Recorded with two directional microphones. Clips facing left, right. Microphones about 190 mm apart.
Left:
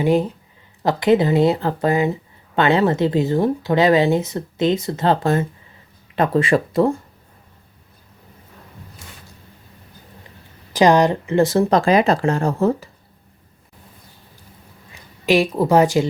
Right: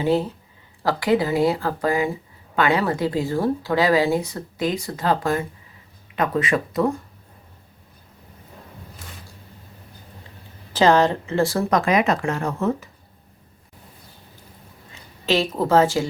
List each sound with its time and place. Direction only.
0.0 s speech: 15° left (ahead or behind)
10.7 s speech: 15° left (ahead or behind); by 12.9 s 30° left (ahead or behind)
15.3 s speech: 15° left (ahead or behind)